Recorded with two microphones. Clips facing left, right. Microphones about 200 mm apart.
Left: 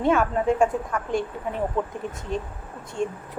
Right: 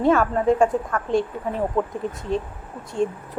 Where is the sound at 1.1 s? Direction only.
30° right (ahead or behind).